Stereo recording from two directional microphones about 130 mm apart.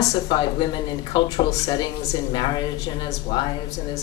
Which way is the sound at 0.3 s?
35° left (ahead or behind).